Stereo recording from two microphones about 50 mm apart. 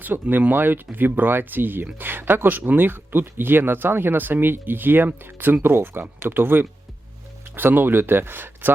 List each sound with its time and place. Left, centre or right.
0.0 s speech: right